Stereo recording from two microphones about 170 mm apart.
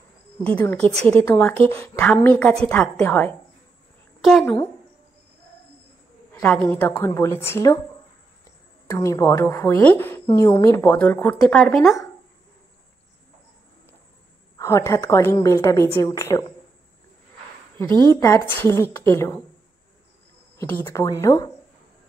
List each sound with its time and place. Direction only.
0.4 s a woman's voice: 10° left (ahead or behind)
4.2 s a woman's voice: centre (ahead or behind)
6.4 s a woman's voice: 10° left (ahead or behind)
8.8 s a woman's voice: 20° left (ahead or behind); by 12.0 s centre (ahead or behind)
14.6 s a woman's voice: 15° left (ahead or behind)
18.0 s a woman's voice: 20° left (ahead or behind)
20.5 s a woman's voice: 15° left (ahead or behind)